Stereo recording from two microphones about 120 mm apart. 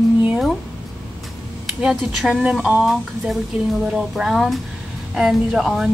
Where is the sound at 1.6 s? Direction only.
5° right (ahead or behind).